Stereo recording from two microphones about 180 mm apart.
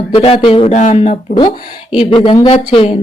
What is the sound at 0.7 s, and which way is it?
Speech, 40° left (ahead or behind).